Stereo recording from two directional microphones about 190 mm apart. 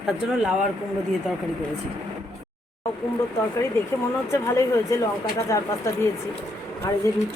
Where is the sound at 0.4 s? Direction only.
Centre (ahead or behind).